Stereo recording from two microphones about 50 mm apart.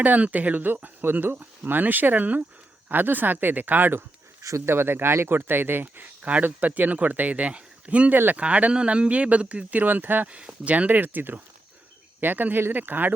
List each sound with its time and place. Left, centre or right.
0.0 s speech: right
4.4 s speech: right
8.1 s speech: right
8.4 s speech: right
10.3 s speech: right
11.0 s speech: right